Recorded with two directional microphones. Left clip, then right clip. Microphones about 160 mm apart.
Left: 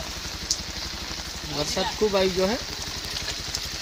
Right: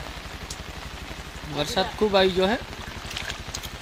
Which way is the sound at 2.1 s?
20° right (ahead or behind).